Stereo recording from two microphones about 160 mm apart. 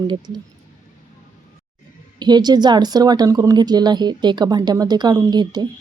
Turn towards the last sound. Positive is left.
turn(degrees=-25)  # may be behind; listen again after turning